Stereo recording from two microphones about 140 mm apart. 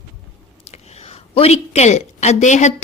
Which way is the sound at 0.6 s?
50° left (ahead or behind).